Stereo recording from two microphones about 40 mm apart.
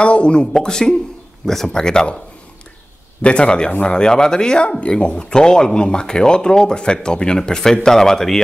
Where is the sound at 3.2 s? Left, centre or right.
Left.